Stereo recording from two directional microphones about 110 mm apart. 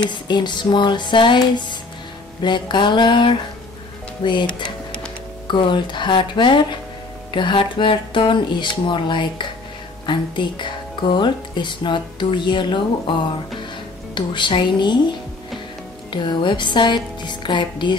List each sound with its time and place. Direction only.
0.0 s speech: 45° left (ahead or behind)
4.6 s a sound: 10° left (ahead or behind)
5.5 s speech: 45° left (ahead or behind)
14.1 s speech: 45° left (ahead or behind)